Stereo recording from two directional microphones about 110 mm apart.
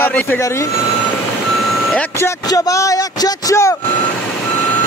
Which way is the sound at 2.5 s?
30° left (ahead or behind).